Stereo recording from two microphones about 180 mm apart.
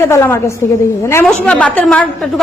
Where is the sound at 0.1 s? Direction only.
15° left (ahead or behind).